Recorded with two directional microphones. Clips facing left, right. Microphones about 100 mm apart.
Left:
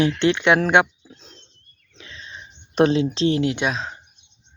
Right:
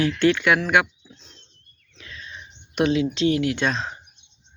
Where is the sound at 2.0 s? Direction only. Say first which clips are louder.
Even; 25° left (ahead or behind).